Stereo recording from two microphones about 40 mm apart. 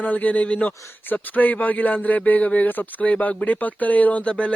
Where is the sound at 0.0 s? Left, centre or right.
Left.